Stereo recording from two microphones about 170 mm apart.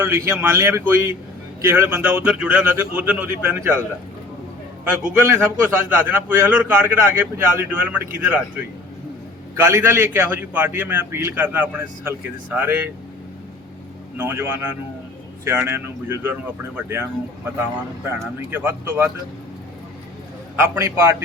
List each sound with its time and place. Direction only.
0.0 s a man's voice: 15° right (ahead or behind)
5.2 s a man's voice: 15° right (ahead or behind)
9.6 s a man's voice: 15° right (ahead or behind)
14.2 s a man's voice: 15° right (ahead or behind)
18.2 s a man's voice: 10° right (ahead or behind)
20.6 s a man's voice: 15° right (ahead or behind)